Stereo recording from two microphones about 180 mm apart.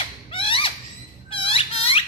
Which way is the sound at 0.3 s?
30° left (ahead or behind).